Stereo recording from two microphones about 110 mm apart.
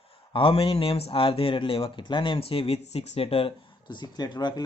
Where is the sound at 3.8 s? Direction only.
40° left (ahead or behind).